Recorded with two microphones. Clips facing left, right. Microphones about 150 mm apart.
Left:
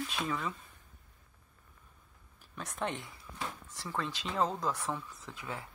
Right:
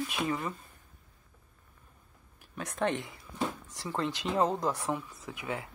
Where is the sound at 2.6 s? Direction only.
60° right (ahead or behind).